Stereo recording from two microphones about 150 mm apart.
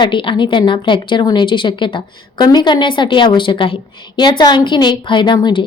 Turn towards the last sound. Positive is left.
turn(degrees=30)  # may be behind; listen again after turning